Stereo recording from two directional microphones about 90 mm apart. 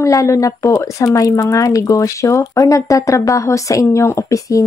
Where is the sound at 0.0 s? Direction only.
35° left (ahead or behind).